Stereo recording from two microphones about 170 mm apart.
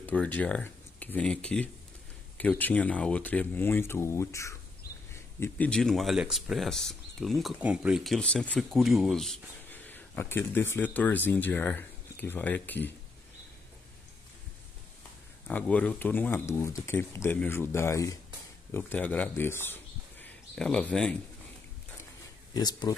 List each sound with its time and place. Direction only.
0.0 s speech: 10° left (ahead or behind)
15.5 s speech: 10° left (ahead or behind)
22.5 s speech: 25° left (ahead or behind)